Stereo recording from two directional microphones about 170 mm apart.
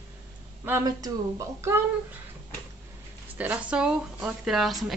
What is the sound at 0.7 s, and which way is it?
A child's voice, 20° right (ahead or behind).